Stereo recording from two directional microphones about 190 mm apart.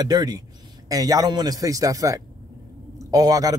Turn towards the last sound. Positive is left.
turn(degrees=-20)  # may be behind; listen again after turning